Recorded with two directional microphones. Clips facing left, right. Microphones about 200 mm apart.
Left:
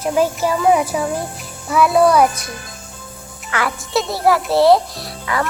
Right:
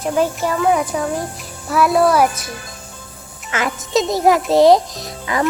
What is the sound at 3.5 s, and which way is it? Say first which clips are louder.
A child's voice: right 1 dB; 20° right (ahead or behind).